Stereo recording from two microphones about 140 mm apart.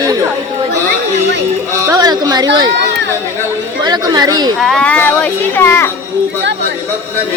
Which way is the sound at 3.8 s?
30° right (ahead or behind).